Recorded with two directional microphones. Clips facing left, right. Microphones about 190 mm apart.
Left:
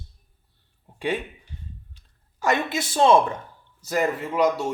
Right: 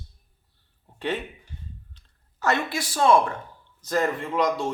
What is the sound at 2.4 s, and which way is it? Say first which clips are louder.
Speech: left 2 dB; 20° left (ahead or behind).